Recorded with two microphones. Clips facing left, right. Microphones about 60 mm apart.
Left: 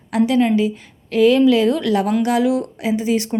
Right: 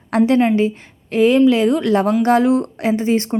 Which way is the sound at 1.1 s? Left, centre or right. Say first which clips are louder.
Even; right.